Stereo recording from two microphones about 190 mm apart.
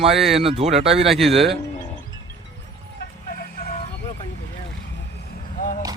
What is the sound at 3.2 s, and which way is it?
Music, 50° left (ahead or behind).